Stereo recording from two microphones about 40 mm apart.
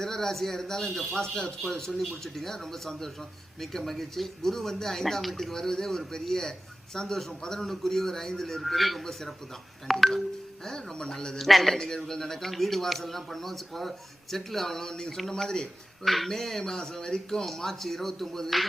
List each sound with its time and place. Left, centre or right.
0.0 s a man's voice: centre
10.7 s a man's voice: centre
11.3 s a man's voice: centre
16.0 s a man's voice: centre
17.4 s a man's voice: centre